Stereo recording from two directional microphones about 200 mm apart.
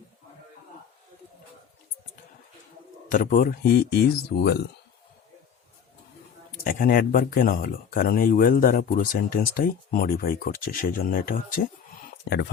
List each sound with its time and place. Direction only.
3.1 s speech: 40° left (ahead or behind)
6.7 s speech: 45° left (ahead or behind)
12.2 s speech: 55° left (ahead or behind)